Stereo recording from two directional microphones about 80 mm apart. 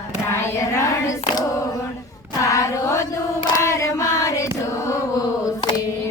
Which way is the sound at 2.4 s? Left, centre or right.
Left.